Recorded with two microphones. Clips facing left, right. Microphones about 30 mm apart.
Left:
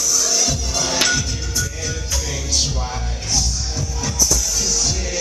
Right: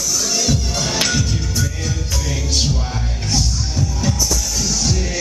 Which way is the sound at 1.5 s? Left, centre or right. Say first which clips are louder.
Right 2 dB; right.